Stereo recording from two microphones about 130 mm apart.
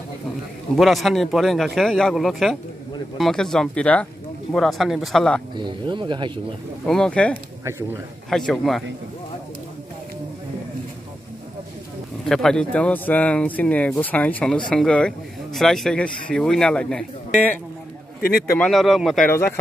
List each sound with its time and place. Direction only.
0.7 s speech: centre (ahead or behind)
5.6 s speech: 35° right (ahead or behind)
6.9 s speech: 5° left (ahead or behind)
12.3 s speech: 5° left (ahead or behind)
18.6 s speech: centre (ahead or behind)